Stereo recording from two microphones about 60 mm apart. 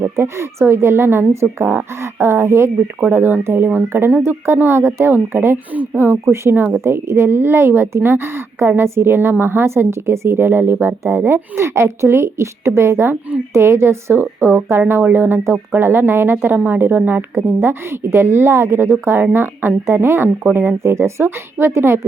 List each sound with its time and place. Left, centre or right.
0.0 s a woman's voice: right
5.7 s a woman's voice: right